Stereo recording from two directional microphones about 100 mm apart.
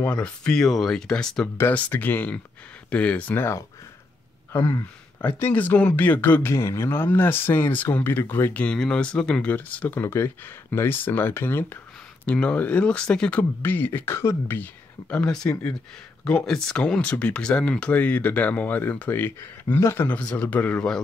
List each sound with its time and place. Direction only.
0.0 s speech: 10° left (ahead or behind)
1.6 s speech: 20° left (ahead or behind)
5.2 s speech: 15° left (ahead or behind)
12.3 s speech: 10° left (ahead or behind)